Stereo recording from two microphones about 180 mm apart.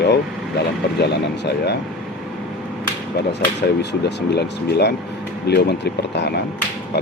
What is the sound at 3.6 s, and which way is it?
Speech, 70° left (ahead or behind).